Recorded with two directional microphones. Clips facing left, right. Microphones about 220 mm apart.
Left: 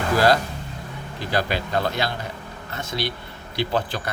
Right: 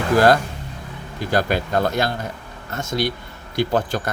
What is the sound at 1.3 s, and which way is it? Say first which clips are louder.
Speech: right 4 dB; 45° right (ahead or behind).